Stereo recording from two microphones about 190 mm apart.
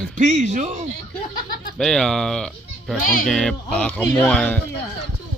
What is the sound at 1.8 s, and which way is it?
Speech, 5° left (ahead or behind).